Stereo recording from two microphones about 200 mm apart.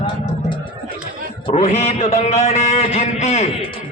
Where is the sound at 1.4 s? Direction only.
30° left (ahead or behind).